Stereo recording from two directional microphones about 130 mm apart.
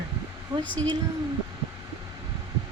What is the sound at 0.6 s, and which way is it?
Speech, 10° left (ahead or behind).